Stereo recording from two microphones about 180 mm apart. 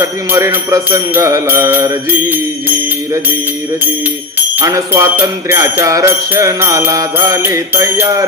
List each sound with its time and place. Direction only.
0.0 s jingle bell: 15° right (ahead or behind)
4.5 s jingle bell: 15° right (ahead or behind)